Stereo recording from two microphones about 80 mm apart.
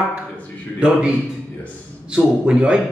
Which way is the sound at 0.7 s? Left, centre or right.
Centre.